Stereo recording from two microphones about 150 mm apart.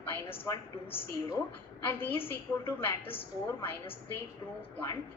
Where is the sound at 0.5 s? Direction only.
20° left (ahead or behind).